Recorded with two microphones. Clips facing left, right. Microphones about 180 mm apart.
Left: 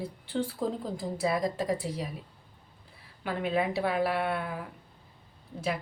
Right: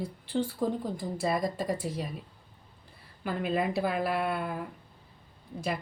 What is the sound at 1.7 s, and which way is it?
Speech, 70° left (ahead or behind).